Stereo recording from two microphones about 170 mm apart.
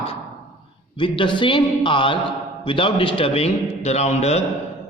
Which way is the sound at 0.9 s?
30° left (ahead or behind).